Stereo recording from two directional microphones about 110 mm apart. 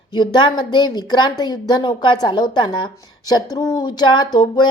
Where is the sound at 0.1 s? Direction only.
45° left (ahead or behind).